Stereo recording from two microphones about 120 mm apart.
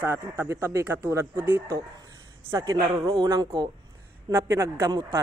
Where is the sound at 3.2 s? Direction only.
30° right (ahead or behind).